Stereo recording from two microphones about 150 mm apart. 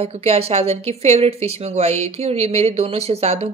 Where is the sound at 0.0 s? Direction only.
40° right (ahead or behind).